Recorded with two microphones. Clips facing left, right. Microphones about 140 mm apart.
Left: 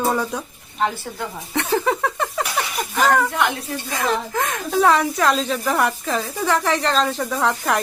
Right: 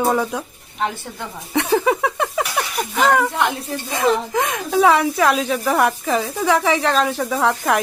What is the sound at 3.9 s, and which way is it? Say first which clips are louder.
Speech: right 4 dB; 15° right (ahead or behind).